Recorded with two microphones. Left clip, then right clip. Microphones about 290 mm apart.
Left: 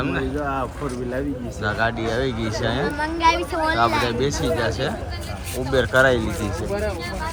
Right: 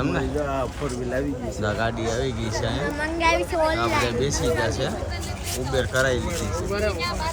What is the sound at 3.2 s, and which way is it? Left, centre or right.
Speech, centre.